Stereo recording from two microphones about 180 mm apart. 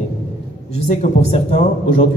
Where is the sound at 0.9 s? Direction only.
40° left (ahead or behind).